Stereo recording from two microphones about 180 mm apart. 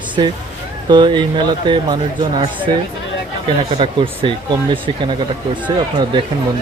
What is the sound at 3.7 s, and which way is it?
Speech, 30° right (ahead or behind).